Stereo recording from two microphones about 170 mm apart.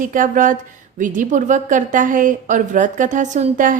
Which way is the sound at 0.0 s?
50° right (ahead or behind).